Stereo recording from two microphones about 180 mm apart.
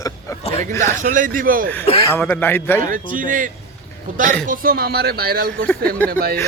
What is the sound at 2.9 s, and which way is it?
Speech, 50° right (ahead or behind).